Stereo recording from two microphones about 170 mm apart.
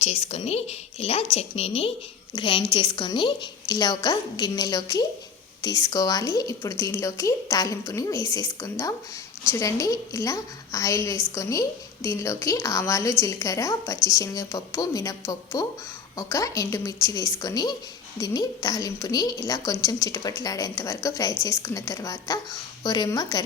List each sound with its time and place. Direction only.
0.0 s a woman's voice: 40° left (ahead or behind); by 23.4 s 20° left (ahead or behind)